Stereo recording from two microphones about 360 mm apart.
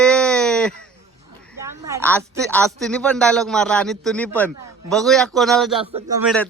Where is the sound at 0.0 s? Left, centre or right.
Centre.